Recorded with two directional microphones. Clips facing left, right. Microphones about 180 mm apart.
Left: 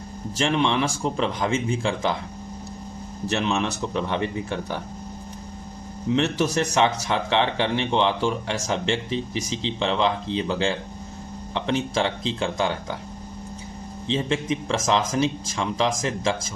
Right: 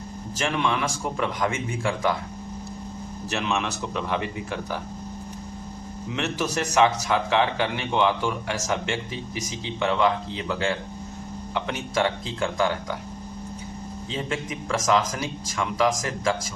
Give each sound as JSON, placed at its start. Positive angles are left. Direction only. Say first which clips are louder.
{"t": 0.3, "sound": "speech", "louder": "left 3 dB", "side_deg": 30}
{"t": 3.2, "sound": "a man's voice", "louder": "left 3 dB", "side_deg": 30}
{"t": 6.1, "sound": "speech", "louder": "left 6 dB", "side_deg": 30}
{"t": 14.1, "sound": "speech", "louder": "left 6 dB", "side_deg": 25}